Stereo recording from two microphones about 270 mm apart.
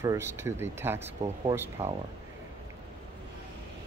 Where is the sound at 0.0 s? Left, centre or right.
Centre.